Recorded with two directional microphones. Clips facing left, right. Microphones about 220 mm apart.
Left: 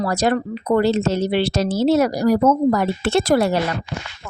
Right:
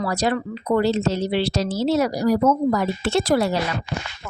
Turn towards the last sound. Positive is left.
turn(degrees=55)  # may be behind; listen again after turning